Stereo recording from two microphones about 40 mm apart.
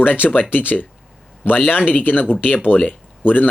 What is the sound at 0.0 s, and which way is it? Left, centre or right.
Speech, left.